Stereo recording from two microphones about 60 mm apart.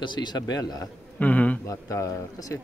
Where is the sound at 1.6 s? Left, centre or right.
Left.